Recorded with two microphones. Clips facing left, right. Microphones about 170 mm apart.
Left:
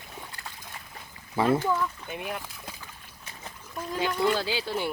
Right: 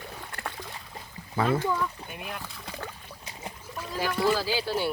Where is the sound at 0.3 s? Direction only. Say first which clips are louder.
Right 6 dB; 60° right (ahead or behind).